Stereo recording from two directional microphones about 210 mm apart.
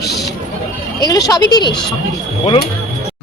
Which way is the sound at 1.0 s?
15° left (ahead or behind).